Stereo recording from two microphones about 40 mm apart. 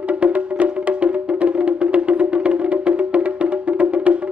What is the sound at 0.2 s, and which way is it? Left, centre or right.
Music, right.